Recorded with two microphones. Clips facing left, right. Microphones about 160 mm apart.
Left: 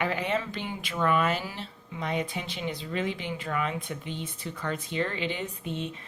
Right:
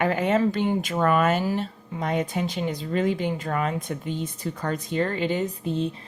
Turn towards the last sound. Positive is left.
turn(degrees=-35)  # may be behind; listen again after turning